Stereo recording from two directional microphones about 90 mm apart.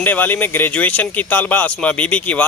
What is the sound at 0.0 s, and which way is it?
Speech, 20° left (ahead or behind).